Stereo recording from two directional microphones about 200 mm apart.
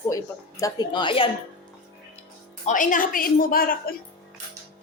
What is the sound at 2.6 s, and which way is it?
A woman's voice, 40° left (ahead or behind).